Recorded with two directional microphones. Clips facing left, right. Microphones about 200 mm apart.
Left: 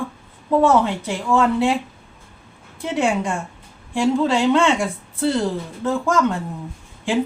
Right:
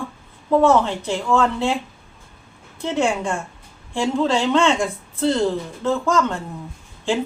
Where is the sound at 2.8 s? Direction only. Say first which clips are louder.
Even; 15° left (ahead or behind).